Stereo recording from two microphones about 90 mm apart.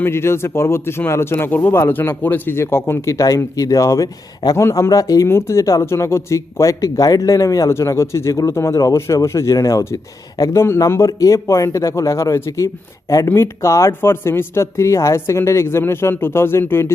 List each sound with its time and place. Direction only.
0.0 s speech: 30° left (ahead or behind)